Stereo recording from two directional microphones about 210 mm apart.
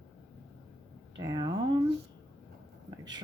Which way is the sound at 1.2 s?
20° right (ahead or behind).